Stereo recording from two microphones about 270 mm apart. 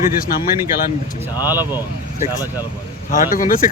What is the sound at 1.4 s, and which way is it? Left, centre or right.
Speech, centre.